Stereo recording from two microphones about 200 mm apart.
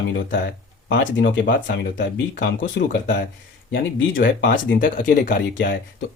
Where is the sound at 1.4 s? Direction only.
45° left (ahead or behind).